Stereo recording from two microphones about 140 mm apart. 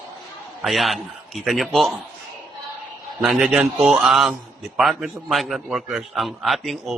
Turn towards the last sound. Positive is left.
turn(degrees=0)  # may be behind; listen again after turning